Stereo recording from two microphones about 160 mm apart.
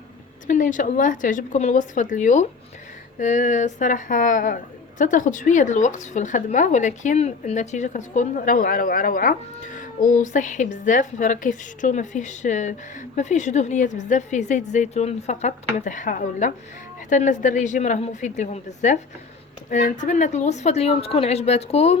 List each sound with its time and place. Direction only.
0.4 s a woman's voice: 55° left (ahead or behind)